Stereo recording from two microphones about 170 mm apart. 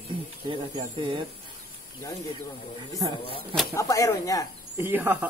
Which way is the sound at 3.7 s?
20° left (ahead or behind).